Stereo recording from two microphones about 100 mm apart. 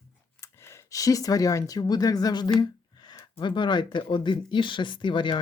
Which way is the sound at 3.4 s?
50° left (ahead or behind).